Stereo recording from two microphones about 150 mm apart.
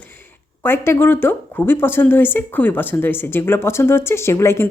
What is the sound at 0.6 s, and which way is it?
A woman's voice, 15° left (ahead or behind).